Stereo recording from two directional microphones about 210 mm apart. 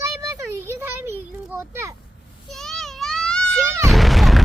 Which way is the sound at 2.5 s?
Centre (ahead or behind).